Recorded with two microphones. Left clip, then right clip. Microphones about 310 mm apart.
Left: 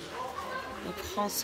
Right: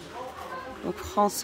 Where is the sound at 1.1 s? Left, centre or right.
Right.